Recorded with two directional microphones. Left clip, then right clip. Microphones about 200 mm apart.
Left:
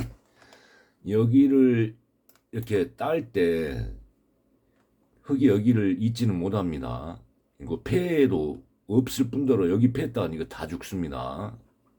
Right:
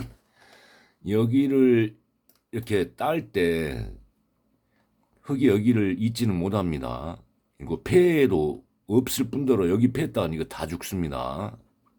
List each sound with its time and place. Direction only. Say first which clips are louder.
0.4 s a sound: right 1 dB; 20° right (ahead or behind)
2.5 s speech: even; 25° right (ahead or behind)
5.2 s speech: even; 25° right (ahead or behind)